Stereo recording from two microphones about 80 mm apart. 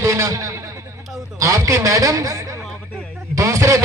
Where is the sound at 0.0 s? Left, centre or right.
Right.